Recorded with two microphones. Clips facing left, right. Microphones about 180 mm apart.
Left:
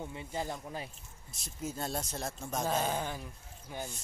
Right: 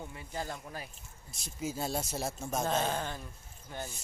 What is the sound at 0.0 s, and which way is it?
Speech, 20° left (ahead or behind).